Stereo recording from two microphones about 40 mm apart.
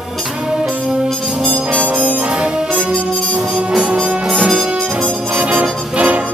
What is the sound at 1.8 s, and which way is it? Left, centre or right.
Harmonica, right.